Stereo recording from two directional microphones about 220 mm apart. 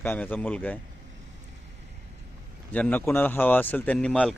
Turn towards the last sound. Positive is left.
turn(degrees=5)  # may be behind; listen again after turning